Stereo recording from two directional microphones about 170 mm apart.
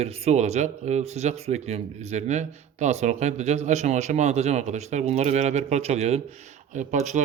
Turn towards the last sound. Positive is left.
turn(degrees=-45)  # may be behind; listen again after turning